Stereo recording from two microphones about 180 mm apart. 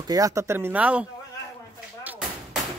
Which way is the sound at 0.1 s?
15° right (ahead or behind).